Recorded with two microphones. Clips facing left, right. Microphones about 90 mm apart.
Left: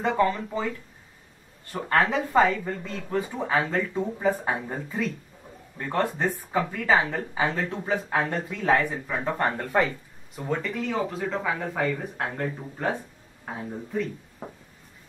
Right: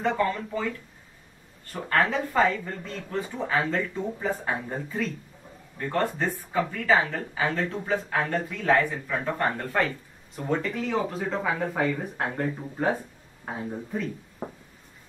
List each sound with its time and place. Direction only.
0.0 s speech: 15° left (ahead or behind)
5.9 s speech: 15° left (ahead or behind)
10.3 s speech: centre (ahead or behind)